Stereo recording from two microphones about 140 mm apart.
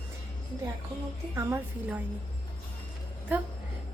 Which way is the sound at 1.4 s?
20° right (ahead or behind).